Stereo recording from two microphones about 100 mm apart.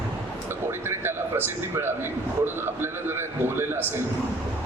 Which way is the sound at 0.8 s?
25° right (ahead or behind).